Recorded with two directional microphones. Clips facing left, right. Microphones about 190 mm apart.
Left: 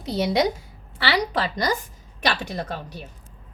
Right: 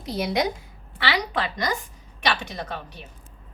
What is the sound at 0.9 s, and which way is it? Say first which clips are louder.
A woman's voice: left 3 dB; 35° left (ahead or behind).